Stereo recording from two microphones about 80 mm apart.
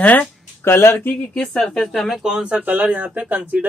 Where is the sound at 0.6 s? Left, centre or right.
Left.